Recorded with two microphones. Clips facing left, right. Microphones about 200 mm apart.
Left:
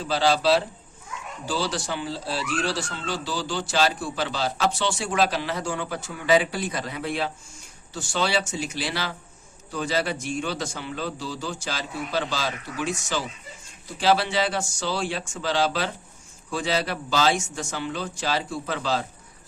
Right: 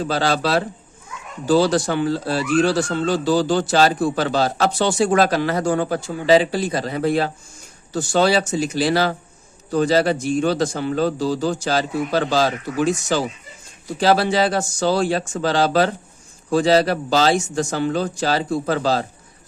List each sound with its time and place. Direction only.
0.0 s speech: 50° right (ahead or behind)
6.0 s a man's voice: 30° right (ahead or behind)